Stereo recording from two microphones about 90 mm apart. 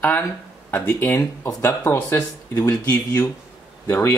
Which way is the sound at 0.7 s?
25° left (ahead or behind).